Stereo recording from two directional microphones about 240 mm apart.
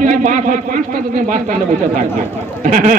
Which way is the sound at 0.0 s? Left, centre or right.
Right.